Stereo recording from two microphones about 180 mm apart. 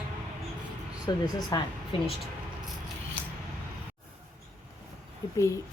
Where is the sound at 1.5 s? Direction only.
25° left (ahead or behind).